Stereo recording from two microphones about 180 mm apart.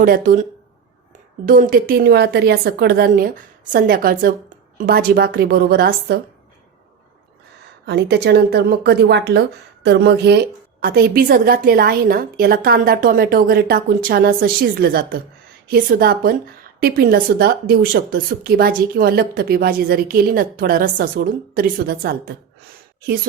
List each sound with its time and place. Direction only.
0.0 s speech: 50° right (ahead or behind)
1.5 s a woman's voice: 50° right (ahead or behind)
7.9 s a woman's voice: 65° right (ahead or behind)